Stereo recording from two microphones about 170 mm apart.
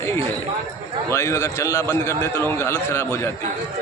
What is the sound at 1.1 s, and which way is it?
A man's voice, 15° left (ahead or behind).